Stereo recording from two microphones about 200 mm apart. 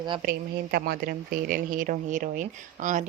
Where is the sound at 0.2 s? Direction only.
45° right (ahead or behind).